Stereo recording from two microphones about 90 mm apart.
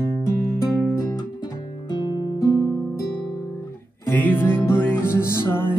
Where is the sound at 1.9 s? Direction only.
50° left (ahead or behind).